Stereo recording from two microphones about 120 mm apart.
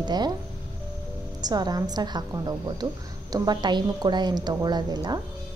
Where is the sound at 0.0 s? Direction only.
35° right (ahead or behind).